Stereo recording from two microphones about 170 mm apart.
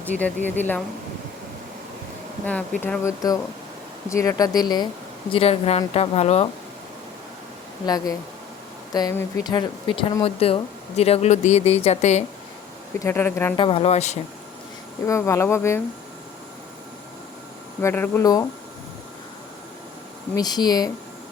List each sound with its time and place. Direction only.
0.0 s speech: 10° left (ahead or behind)
2.5 s speech: 10° left (ahead or behind); by 4.9 s 25° left (ahead or behind)
5.3 s speech: 35° left (ahead or behind)
7.9 s speech: 20° left (ahead or behind); by 12.2 s 40° left (ahead or behind)
13.0 s speech: 15° left (ahead or behind)
13.6 s speech: 35° left (ahead or behind)
15.0 s speech: 15° left (ahead or behind)
17.7 s speech: 10° left (ahead or behind)
20.3 s speech: 25° left (ahead or behind)